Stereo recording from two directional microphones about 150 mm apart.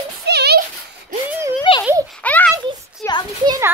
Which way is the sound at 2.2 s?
10° left (ahead or behind).